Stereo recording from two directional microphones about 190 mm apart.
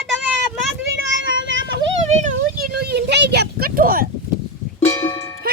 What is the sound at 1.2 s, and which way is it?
Vehicle, 75° right (ahead or behind).